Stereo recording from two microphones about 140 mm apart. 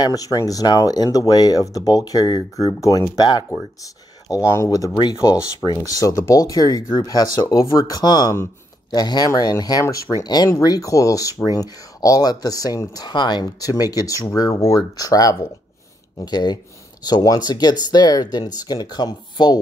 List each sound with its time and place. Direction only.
0.0 s speech: 25° left (ahead or behind)